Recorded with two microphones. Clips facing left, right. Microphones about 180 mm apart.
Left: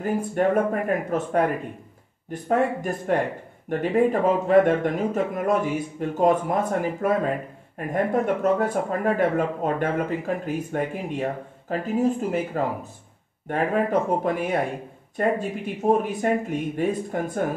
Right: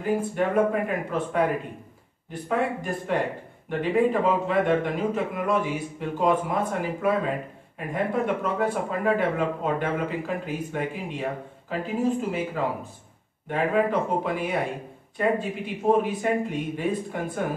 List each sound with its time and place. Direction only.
0.0 s speech: 45° left (ahead or behind)
2.4 s speech: 45° left (ahead or behind)